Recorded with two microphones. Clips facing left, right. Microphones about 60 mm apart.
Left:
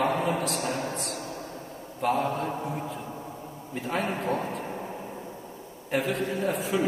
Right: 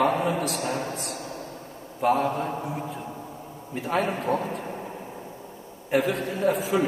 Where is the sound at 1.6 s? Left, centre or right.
Centre.